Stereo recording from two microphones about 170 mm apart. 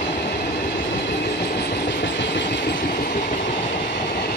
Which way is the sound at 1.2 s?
75° left (ahead or behind).